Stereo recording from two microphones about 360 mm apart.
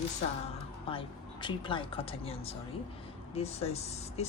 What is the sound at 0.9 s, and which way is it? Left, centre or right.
Speech, centre.